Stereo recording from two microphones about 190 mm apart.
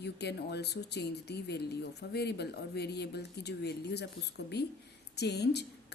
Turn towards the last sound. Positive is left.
turn(degrees=60)  # may be behind; listen again after turning